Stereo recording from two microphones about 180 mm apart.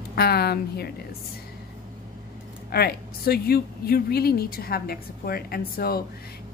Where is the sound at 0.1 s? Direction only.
60° left (ahead or behind).